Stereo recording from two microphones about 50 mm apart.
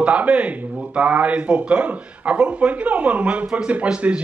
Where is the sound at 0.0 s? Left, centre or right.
Right.